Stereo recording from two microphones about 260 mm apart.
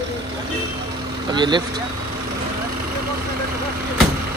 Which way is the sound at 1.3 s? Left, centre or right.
Centre.